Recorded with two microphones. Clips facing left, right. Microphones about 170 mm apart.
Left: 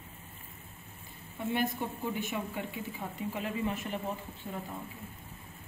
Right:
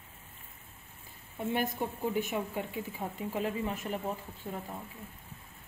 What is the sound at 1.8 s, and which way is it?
Speech, 40° right (ahead or behind).